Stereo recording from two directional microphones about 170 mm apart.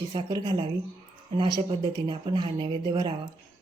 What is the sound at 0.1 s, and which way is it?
A woman's voice, 25° right (ahead or behind).